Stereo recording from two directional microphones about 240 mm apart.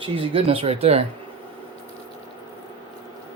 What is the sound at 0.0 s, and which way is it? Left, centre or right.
Speech, right.